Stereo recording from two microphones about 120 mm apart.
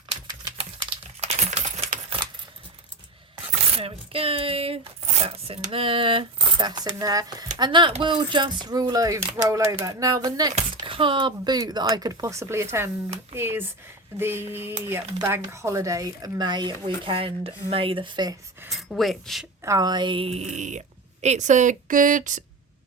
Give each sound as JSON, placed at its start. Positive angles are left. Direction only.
{"t": 1.2, "sound": "coin", "side_deg": -65}
{"t": 3.8, "sound": "chopping", "side_deg": -55}
{"t": 5.7, "sound": "speech", "side_deg": -50}
{"t": 10.8, "sound": "speech", "side_deg": -45}
{"t": 18.7, "sound": "speech", "side_deg": 0}
{"t": 19.6, "sound": "a woman's voice", "side_deg": -30}